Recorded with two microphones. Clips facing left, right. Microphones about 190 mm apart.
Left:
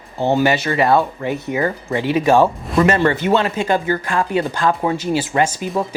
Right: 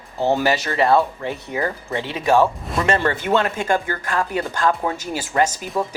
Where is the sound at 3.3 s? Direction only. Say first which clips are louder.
Left 2 dB; 45° right (ahead or behind).